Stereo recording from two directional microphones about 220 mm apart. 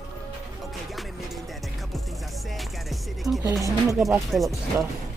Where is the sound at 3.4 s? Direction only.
15° right (ahead or behind).